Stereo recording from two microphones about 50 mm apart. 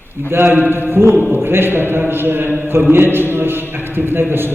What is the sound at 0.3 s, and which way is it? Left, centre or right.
A man's voice, right.